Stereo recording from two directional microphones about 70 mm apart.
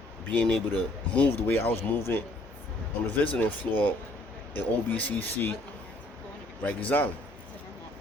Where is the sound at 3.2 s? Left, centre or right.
Left.